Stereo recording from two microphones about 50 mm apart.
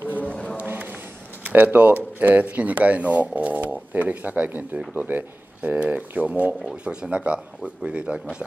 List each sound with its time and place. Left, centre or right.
0.0 s a sound: left
1.4 s speech: right
6.6 s speech: right